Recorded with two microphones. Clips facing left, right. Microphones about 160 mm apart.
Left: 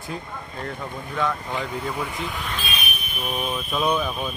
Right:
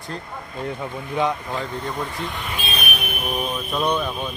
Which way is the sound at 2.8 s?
65° right (ahead or behind).